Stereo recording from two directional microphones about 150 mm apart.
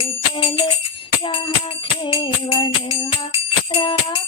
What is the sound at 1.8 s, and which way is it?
Music, 35° left (ahead or behind).